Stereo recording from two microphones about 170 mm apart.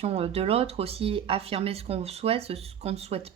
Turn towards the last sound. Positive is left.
turn(degrees=-35)  # may be behind; listen again after turning